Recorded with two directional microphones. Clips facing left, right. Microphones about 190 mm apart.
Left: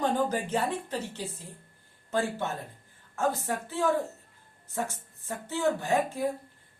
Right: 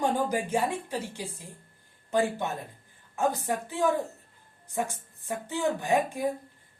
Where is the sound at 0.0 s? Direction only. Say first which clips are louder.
Even; 10° right (ahead or behind).